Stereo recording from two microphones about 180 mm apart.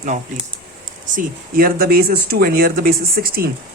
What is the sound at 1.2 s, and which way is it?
Speech, 55° right (ahead or behind).